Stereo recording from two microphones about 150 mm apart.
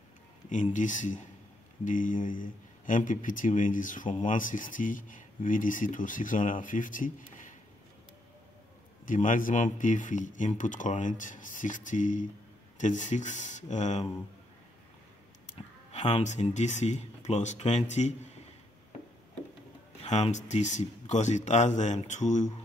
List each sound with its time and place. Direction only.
0.5 s speech: 55° left (ahead or behind)
9.0 s speech: 60° left (ahead or behind)
15.9 s speech: 50° left (ahead or behind)
20.1 s speech: 50° left (ahead or behind)